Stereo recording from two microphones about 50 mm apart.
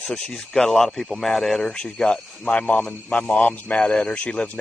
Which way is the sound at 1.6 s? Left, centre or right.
Centre.